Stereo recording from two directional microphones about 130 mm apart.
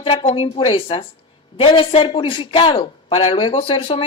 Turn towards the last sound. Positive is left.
turn(degrees=45)  # may be behind; listen again after turning